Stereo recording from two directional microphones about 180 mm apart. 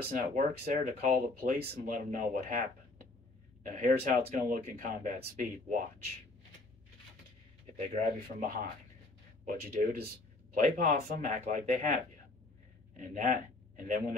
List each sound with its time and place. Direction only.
0.1 s speech: 45° right (ahead or behind)
8.4 s speech: 55° right (ahead or behind)